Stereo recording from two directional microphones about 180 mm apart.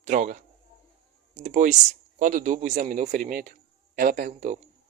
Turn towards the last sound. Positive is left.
turn(degrees=-40)  # may be behind; listen again after turning